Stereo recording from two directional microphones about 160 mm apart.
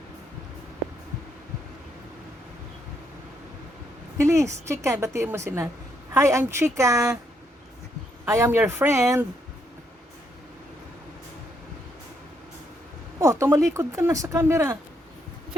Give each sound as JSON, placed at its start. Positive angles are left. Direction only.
{"t": 4.2, "sound": "a woman's voice", "side_deg": -20}
{"t": 8.2, "sound": "a woman's voice", "side_deg": -15}
{"t": 13.1, "sound": "speech", "side_deg": -20}